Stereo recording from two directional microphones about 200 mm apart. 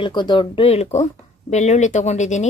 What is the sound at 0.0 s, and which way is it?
Speech, 25° left (ahead or behind).